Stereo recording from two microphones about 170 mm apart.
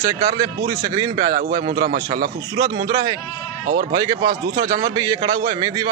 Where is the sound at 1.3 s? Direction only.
55° right (ahead or behind).